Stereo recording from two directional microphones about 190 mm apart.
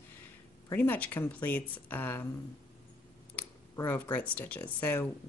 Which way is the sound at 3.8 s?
10° left (ahead or behind).